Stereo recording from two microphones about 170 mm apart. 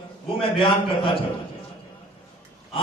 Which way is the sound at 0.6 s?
30° left (ahead or behind).